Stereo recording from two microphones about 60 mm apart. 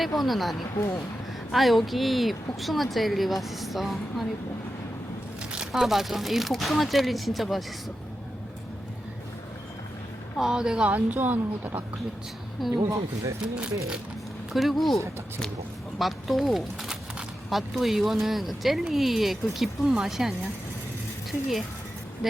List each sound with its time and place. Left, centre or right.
0.2 s a woman's voice: centre
5.5 s a woman's voice: centre
10.3 s speech: centre
10.8 s speech: right
12.6 s a woman's voice: centre
13.4 s speech: centre
14.5 s a woman's voice: centre
16.0 s a woman's voice: centre
22.2 s a woman's voice: centre